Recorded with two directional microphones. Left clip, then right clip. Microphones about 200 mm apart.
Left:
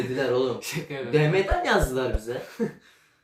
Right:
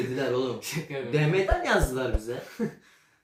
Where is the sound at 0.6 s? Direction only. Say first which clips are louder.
Left 1 dB; 15° left (ahead or behind).